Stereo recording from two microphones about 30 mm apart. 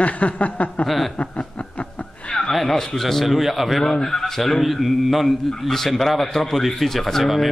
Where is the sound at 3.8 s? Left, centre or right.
Centre.